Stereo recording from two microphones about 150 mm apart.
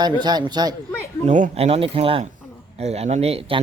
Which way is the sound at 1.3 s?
50° right (ahead or behind).